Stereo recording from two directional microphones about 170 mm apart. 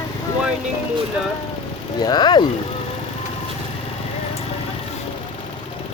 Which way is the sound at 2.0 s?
25° left (ahead or behind).